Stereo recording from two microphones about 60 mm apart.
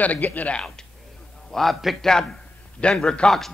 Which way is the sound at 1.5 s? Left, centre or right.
Centre.